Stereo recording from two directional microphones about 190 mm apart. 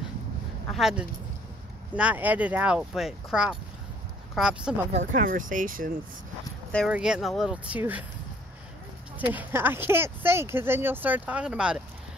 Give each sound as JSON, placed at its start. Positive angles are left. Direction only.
{"t": 0.7, "sound": "speech", "side_deg": 0}
{"t": 4.9, "sound": "speech", "side_deg": -45}
{"t": 6.9, "sound": "speech", "side_deg": -5}
{"t": 9.3, "sound": "speech", "side_deg": -10}